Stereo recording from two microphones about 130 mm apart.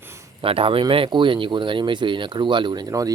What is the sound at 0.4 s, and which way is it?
Speech, 45° right (ahead or behind).